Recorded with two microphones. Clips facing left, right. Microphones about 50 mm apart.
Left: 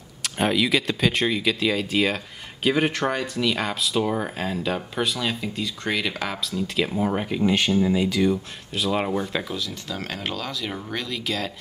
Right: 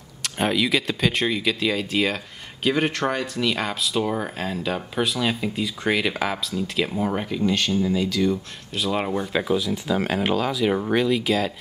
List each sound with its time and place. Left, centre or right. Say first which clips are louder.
0.2 s speech: even; centre
7.2 s speech: left 1 dB; centre
8.7 s speech: even; centre
9.4 s speech: right 8 dB; centre